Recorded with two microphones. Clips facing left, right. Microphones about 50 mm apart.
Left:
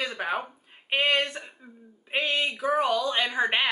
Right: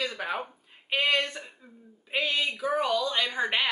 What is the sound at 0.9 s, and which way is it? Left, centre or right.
Speech, left.